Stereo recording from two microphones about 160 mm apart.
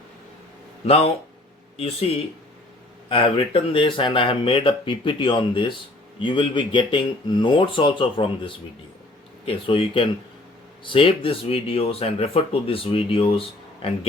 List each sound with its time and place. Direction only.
0.9 s speech: 40° left (ahead or behind)